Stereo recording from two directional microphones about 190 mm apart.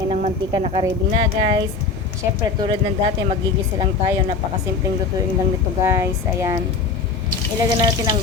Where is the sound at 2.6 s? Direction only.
30° right (ahead or behind).